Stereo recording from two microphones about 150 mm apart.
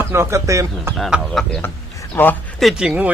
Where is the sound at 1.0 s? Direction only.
Centre (ahead or behind).